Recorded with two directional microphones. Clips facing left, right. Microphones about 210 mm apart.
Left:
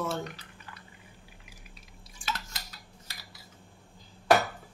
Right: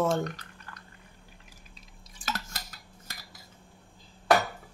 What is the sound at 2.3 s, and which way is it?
Cutlery, 50° right (ahead or behind).